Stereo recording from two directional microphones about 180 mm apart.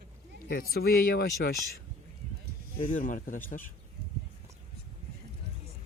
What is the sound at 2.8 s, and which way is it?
Speech, 45° left (ahead or behind).